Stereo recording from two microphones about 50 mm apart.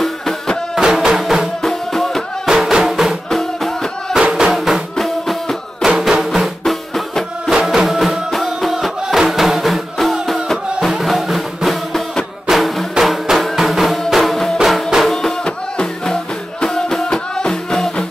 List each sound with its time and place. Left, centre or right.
0.0 s music: centre
0.7 s music: centre
1.6 s music: centre
2.5 s music: centre
3.3 s music: centre
4.1 s music: centre
4.9 s music: centre
15.4 s music: centre